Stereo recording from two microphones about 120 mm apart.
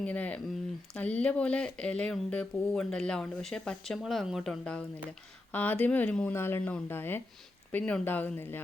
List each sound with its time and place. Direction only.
0.0 s speech: 10° left (ahead or behind)